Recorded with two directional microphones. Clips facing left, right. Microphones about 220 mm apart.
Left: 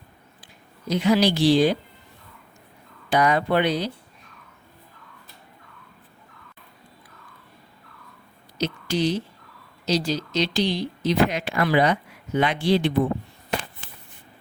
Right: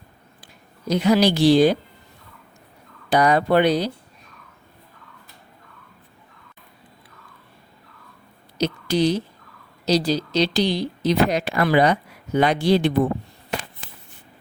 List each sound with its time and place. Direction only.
0.4 s speech: 40° right (ahead or behind)
3.1 s speech: 35° right (ahead or behind)
8.5 s speech: 40° right (ahead or behind)